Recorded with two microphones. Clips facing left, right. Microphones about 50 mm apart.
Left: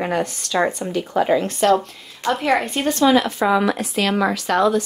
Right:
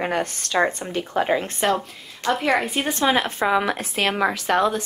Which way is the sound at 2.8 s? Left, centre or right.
Right.